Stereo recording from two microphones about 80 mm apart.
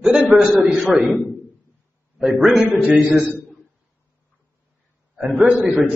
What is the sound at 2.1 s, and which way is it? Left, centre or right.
Speech, centre.